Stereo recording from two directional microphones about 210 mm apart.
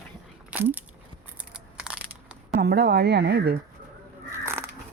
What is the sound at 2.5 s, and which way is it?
Speech, 50° right (ahead or behind).